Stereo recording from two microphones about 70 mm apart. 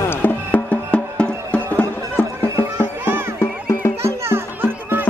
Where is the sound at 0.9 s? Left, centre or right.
Centre.